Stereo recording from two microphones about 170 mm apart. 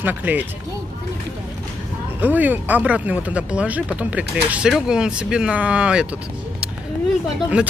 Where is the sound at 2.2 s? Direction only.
10° right (ahead or behind).